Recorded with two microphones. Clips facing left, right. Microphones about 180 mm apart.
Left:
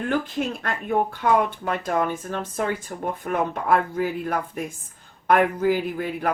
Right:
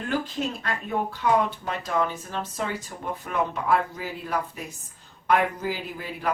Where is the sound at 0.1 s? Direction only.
55° left (ahead or behind).